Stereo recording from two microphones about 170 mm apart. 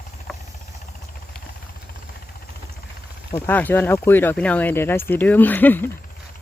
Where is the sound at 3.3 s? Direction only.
10° left (ahead or behind).